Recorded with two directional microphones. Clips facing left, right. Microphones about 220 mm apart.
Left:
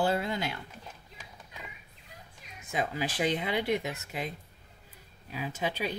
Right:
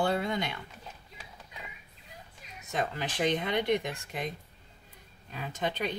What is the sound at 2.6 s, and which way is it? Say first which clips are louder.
Speech: left 1 dB; 10° left (ahead or behind).